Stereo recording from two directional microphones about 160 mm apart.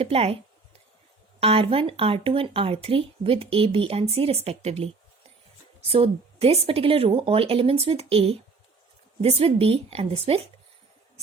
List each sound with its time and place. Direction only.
0.0 s speech: 35° right (ahead or behind)
1.4 s speech: 35° right (ahead or behind)
5.9 s speech: 35° right (ahead or behind)